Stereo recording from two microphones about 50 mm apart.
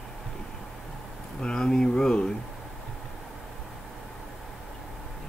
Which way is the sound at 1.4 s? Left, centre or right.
Centre.